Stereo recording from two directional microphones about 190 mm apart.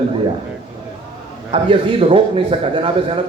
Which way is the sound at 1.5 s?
30° right (ahead or behind).